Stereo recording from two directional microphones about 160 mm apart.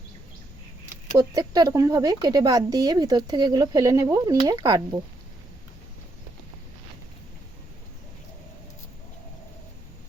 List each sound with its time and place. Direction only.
1.1 s speech: 20° right (ahead or behind)